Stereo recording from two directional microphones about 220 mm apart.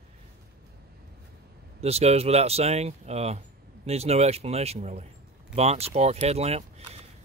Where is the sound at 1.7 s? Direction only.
30° right (ahead or behind).